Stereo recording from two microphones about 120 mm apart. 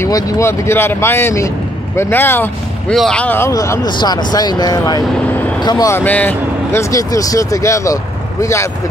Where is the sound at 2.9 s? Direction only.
5° left (ahead or behind); by 3.8 s 25° left (ahead or behind).